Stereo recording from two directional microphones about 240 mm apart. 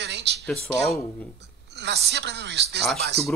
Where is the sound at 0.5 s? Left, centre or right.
Centre.